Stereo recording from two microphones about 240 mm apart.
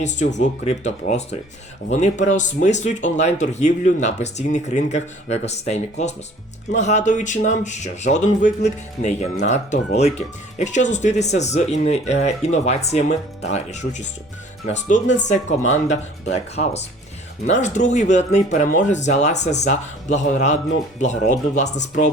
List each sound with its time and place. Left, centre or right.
0.0 s speech: left